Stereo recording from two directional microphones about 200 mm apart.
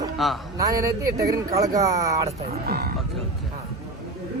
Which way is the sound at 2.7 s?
50° right (ahead or behind).